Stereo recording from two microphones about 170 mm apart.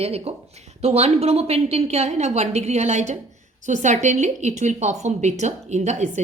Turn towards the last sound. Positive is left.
turn(degrees=-40)  # may be behind; listen again after turning